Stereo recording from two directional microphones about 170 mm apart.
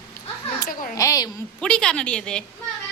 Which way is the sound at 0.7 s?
55° left (ahead or behind).